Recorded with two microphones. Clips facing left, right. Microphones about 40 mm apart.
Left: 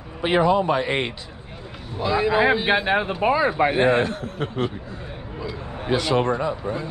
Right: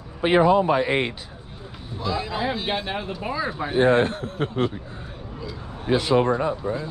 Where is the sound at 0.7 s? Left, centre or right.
Centre.